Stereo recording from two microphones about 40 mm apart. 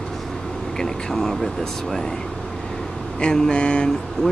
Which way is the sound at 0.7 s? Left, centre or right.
Centre.